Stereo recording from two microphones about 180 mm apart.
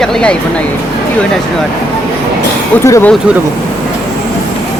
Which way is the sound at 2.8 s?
15° left (ahead or behind).